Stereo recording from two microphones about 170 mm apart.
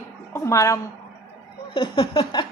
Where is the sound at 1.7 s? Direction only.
30° left (ahead or behind).